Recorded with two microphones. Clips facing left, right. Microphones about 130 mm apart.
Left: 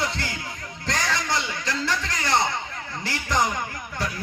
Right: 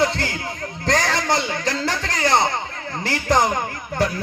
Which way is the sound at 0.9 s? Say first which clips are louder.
Right 6 dB; 50° right (ahead or behind).